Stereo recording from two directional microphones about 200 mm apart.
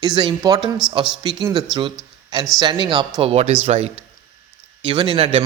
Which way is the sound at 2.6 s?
25° right (ahead or behind).